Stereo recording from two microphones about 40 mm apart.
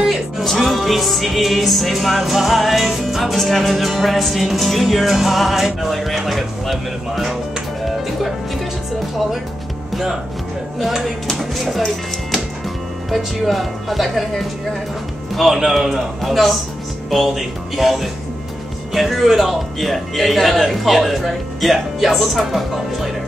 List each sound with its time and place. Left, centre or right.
0.0 s music: centre
10.8 s music: centre
11.3 s speech: centre
13.1 s music: centre